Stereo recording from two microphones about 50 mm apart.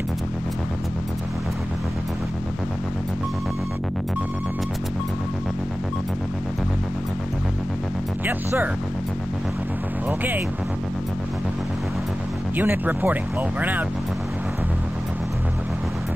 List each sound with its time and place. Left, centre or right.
10.0 s music: right
12.5 s speech: right